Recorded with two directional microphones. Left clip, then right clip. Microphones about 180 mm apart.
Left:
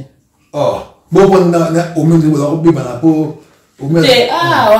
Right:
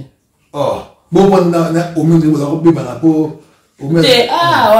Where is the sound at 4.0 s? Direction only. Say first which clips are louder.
Even; 20° right (ahead or behind).